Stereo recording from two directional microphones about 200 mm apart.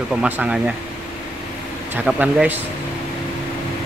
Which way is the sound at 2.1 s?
5° right (ahead or behind).